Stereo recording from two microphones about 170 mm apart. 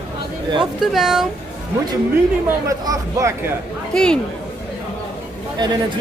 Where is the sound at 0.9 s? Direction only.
Centre (ahead or behind).